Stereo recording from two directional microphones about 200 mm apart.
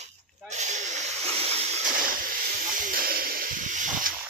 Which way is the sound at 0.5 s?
35° right (ahead or behind).